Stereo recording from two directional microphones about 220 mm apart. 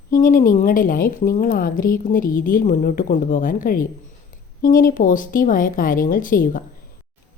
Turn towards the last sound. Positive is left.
turn(degrees=40)  # may be behind; listen again after turning